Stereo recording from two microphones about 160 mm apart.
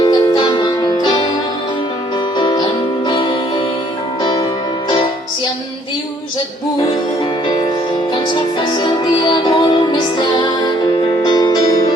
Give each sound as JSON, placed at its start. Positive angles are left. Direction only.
{"t": 0.0, "sound": "music", "side_deg": 25}
{"t": 2.4, "sound": "music", "side_deg": 25}
{"t": 8.1, "sound": "music", "side_deg": 30}